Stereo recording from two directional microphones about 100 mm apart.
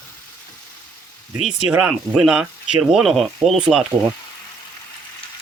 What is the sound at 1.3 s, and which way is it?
Speech, 10° right (ahead or behind).